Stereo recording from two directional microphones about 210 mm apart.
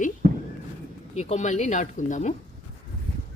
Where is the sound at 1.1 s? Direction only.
30° left (ahead or behind).